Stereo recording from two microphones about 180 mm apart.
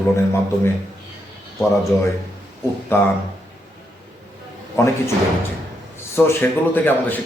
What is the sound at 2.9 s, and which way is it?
Speech, 10° left (ahead or behind).